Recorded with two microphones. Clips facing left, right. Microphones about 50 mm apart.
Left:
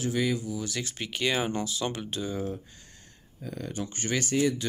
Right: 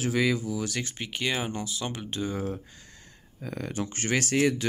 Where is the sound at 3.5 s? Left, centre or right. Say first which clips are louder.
Right 2 dB; right.